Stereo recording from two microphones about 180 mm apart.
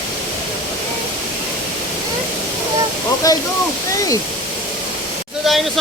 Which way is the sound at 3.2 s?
20° left (ahead or behind).